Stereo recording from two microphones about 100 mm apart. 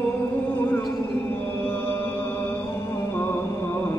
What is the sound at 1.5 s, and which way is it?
Chant, 20° left (ahead or behind).